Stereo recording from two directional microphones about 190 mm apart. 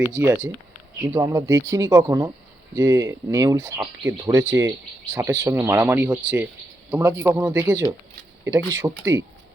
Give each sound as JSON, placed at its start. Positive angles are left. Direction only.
{"t": 0.1, "sound": "speech", "side_deg": -10}